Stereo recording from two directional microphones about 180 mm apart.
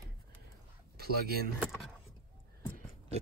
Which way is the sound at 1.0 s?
60° right (ahead or behind).